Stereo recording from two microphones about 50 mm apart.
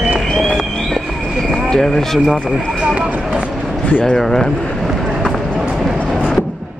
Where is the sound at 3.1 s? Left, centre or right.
Right.